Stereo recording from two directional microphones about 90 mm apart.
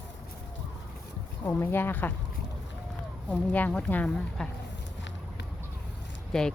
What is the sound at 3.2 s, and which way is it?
Speech, 15° left (ahead or behind).